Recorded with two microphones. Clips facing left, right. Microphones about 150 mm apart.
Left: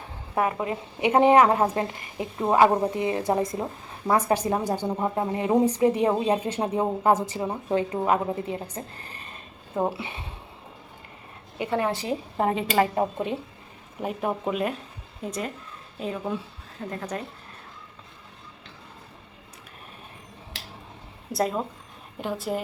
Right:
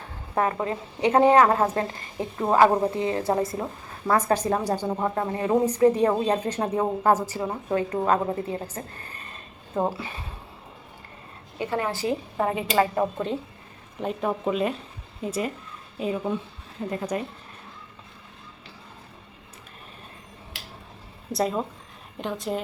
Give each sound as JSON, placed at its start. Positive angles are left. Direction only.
{"t": 0.3, "sound": "a woman's voice", "side_deg": 15}
{"t": 7.9, "sound": "a woman's voice", "side_deg": 10}
{"t": 9.9, "sound": "a woman's voice", "side_deg": 25}
{"t": 11.5, "sound": "a woman's voice", "side_deg": 20}
{"t": 14.0, "sound": "speech", "side_deg": 10}
{"t": 21.3, "sound": "a woman's voice", "side_deg": 0}